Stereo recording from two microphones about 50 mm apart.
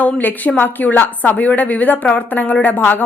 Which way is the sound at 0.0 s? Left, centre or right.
Left.